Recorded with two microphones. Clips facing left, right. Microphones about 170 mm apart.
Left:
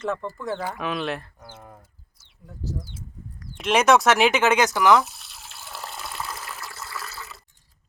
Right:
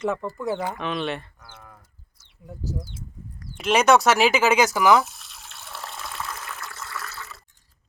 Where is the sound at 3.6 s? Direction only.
Centre (ahead or behind).